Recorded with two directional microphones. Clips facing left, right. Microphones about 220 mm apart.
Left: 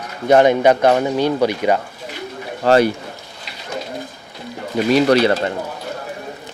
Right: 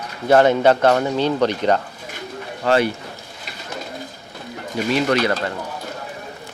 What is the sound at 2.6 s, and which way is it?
Speech, 40° left (ahead or behind).